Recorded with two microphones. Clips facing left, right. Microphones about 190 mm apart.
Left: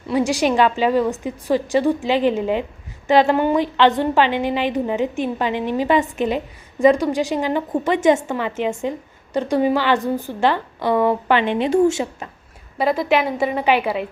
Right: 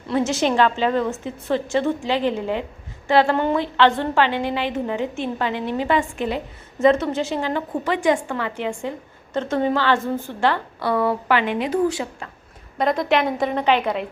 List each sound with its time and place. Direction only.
0.1 s a woman's voice: 15° left (ahead or behind)
12.8 s a woman's voice: 5° left (ahead or behind)